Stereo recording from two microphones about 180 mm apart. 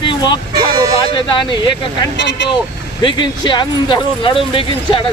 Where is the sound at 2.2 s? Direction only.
75° left (ahead or behind).